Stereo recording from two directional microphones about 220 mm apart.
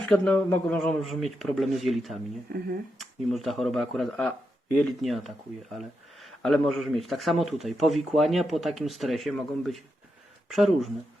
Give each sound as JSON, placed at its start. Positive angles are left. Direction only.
{"t": 0.0, "sound": "speech", "side_deg": 5}
{"t": 2.5, "sound": "speech", "side_deg": -45}
{"t": 3.0, "sound": "speech", "side_deg": 0}